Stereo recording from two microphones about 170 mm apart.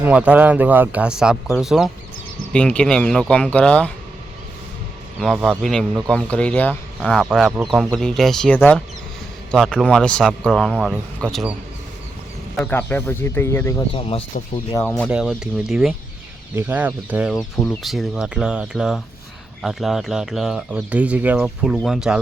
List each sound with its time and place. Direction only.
0.0 s speech: 5° right (ahead or behind)
5.2 s speech: centre (ahead or behind)
12.7 s speech: 10° left (ahead or behind)
13.9 s speech: 35° left (ahead or behind)
14.7 s speech: 10° left (ahead or behind)
15.1 s speech: 5° right (ahead or behind)
16.6 s speech: 10° right (ahead or behind)